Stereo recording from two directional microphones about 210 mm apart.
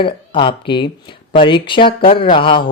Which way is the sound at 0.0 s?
20° left (ahead or behind).